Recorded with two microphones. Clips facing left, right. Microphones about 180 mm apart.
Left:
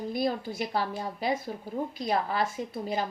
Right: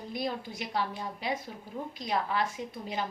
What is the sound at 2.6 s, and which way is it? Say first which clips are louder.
Speech: left 3 dB; 40° left (ahead or behind).